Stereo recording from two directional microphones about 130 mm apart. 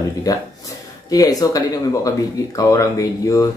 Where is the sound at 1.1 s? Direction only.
25° left (ahead or behind).